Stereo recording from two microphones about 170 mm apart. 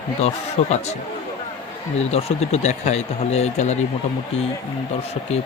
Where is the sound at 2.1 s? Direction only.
40° left (ahead or behind).